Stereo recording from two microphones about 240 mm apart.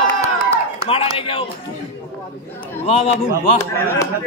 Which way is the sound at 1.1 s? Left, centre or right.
Left.